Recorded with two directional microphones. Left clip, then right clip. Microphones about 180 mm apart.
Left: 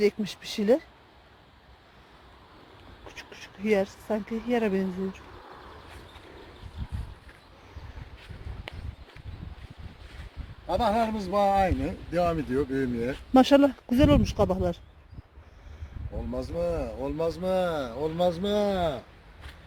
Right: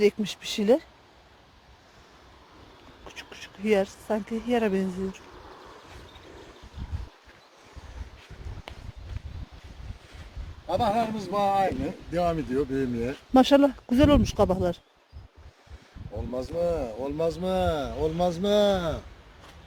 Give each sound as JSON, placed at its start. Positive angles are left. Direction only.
{"t": 0.0, "sound": "speech", "side_deg": -15}
{"t": 3.1, "sound": "speech", "side_deg": -10}
{"t": 8.7, "sound": "a sound", "side_deg": 0}
{"t": 10.7, "sound": "a man's voice", "side_deg": -5}
{"t": 12.1, "sound": "speech", "side_deg": -20}
{"t": 13.1, "sound": "a man's voice", "side_deg": 0}
{"t": 13.9, "sound": "speech", "side_deg": -15}
{"t": 16.3, "sound": "speech", "side_deg": -55}